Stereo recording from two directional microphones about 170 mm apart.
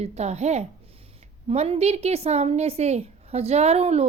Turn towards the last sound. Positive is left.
turn(degrees=-40)  # may be behind; listen again after turning